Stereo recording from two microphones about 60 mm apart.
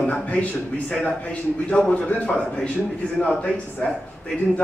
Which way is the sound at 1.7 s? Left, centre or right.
Centre.